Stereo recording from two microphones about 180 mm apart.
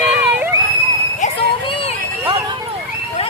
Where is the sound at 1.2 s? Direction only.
30° left (ahead or behind).